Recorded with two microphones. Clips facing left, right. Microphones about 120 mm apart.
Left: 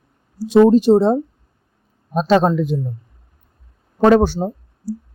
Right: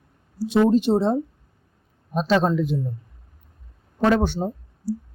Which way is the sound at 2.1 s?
45° left (ahead or behind).